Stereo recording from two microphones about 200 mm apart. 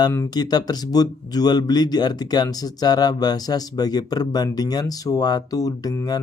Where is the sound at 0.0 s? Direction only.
15° left (ahead or behind).